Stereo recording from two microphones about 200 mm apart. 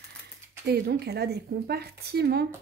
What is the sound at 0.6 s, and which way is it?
Speech, 55° right (ahead or behind).